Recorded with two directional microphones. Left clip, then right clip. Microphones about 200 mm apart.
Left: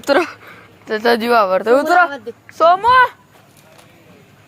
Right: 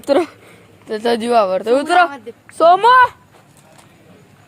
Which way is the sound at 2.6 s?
25° right (ahead or behind).